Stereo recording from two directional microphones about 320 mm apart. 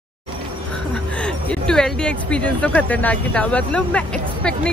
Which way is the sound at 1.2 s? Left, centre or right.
Centre.